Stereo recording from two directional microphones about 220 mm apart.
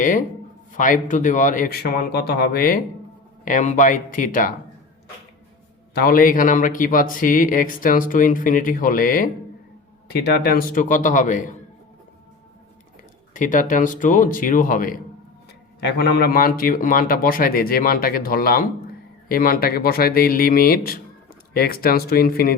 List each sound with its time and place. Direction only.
0.0 s speech: 35° left (ahead or behind)
5.9 s speech: 45° left (ahead or behind)
13.3 s speech: 35° left (ahead or behind)